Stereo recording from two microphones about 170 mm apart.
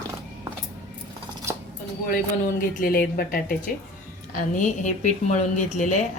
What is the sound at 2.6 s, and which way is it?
A woman's voice, 60° left (ahead or behind).